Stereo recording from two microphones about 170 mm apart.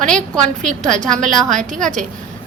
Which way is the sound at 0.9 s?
5° left (ahead or behind).